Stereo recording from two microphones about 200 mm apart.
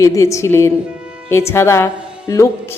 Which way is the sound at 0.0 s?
15° left (ahead or behind).